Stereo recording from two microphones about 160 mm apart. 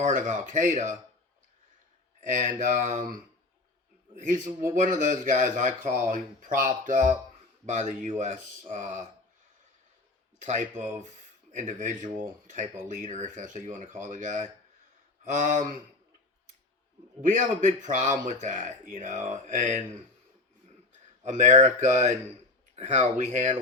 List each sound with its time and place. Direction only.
0.0 s speech: 55° right (ahead or behind)
2.2 s speech: 50° right (ahead or behind)
4.2 s speech: 55° right (ahead or behind)
10.4 s speech: 50° right (ahead or behind)
17.2 s speech: 50° right (ahead or behind)
21.2 s speech: 50° right (ahead or behind)